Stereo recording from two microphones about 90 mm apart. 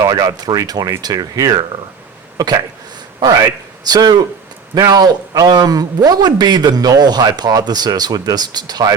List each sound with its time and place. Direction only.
0.0 s a man's voice: 50° right (ahead or behind)
3.2 s a man's voice: 45° right (ahead or behind)